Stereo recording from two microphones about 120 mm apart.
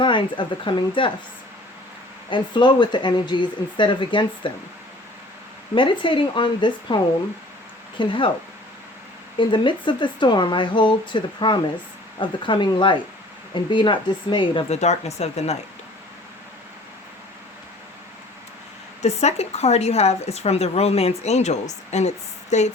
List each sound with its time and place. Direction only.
0.0 s speech: 45° left (ahead or behind)
2.3 s speech: 40° left (ahead or behind)
5.7 s speech: 45° left (ahead or behind)
9.4 s speech: 40° left (ahead or behind)
14.7 s a woman's voice: 65° left (ahead or behind)
19.0 s a woman's voice: 65° left (ahead or behind)